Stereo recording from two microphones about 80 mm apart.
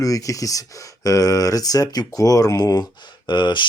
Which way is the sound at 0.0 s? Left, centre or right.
Left.